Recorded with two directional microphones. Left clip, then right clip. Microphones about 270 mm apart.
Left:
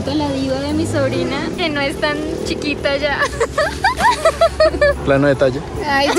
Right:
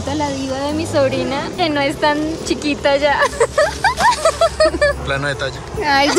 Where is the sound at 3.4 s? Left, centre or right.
Right.